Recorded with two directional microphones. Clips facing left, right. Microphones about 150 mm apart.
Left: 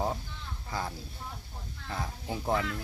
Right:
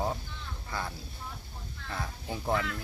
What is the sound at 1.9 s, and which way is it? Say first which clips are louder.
Speech: left 1 dB; 15° left (ahead or behind).